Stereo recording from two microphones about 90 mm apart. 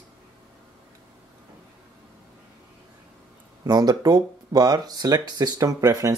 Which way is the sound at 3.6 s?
50° right (ahead or behind).